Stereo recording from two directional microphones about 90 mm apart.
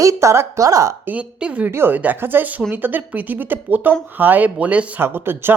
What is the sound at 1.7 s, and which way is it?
Speech, 25° right (ahead or behind).